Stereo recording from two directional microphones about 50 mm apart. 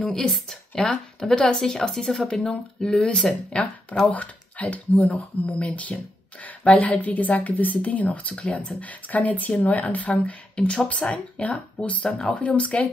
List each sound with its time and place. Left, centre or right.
0.0 s speech: centre
4.1 s a woman's voice: left
8.5 s a woman's voice: left